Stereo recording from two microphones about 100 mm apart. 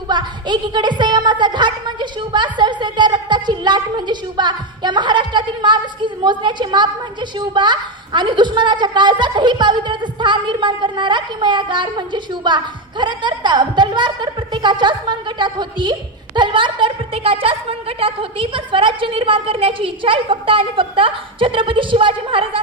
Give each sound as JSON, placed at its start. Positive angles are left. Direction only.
{"t": 0.1, "sound": "a woman's voice", "side_deg": -50}